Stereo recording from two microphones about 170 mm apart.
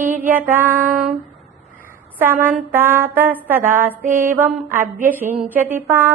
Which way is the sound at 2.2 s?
10° right (ahead or behind).